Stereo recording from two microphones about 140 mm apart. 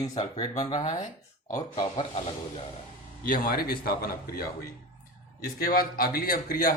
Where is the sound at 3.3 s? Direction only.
90° left.